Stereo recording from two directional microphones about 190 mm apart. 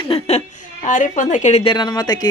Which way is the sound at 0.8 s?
45° left (ahead or behind).